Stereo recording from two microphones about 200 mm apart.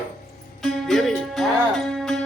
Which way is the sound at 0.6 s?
Centre (ahead or behind).